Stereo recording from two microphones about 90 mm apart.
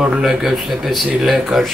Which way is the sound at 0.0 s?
10° right (ahead or behind).